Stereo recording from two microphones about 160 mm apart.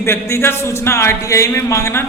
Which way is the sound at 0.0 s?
15° left (ahead or behind).